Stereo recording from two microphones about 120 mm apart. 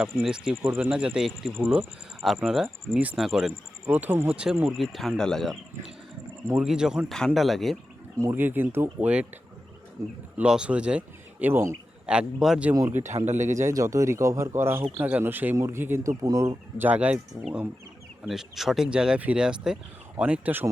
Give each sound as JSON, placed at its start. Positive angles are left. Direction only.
{"t": 0.0, "sound": "speech", "side_deg": -5}
{"t": 3.9, "sound": "speech", "side_deg": -15}
{"t": 4.6, "sound": "speech", "side_deg": 0}
{"t": 8.2, "sound": "speech", "side_deg": -20}
{"t": 10.3, "sound": "speech", "side_deg": -10}
{"t": 12.0, "sound": "speech", "side_deg": -5}
{"t": 12.9, "sound": "speech", "side_deg": -85}
{"t": 13.6, "sound": "a man's voice", "side_deg": -25}
{"t": 16.2, "sound": "speech", "side_deg": -30}
{"t": 16.7, "sound": "speech", "side_deg": -15}